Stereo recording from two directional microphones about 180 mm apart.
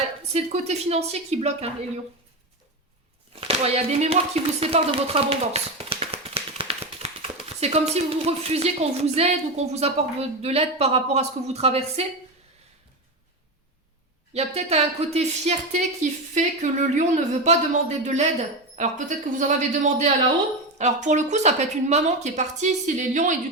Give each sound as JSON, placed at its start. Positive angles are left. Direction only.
{"t": 0.3, "sound": "a woman's voice", "side_deg": -35}
{"t": 3.4, "sound": "speech", "side_deg": -35}
{"t": 14.3, "sound": "a woman's voice", "side_deg": -35}